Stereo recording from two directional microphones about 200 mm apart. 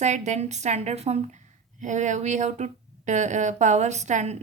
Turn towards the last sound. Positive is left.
turn(degrees=-35)  # may be behind; listen again after turning